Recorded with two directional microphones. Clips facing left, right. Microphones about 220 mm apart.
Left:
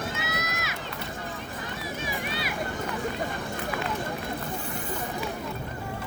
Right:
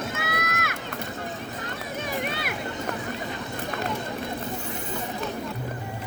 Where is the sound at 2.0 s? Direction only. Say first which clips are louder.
Right 4 dB; 55° right (ahead or behind).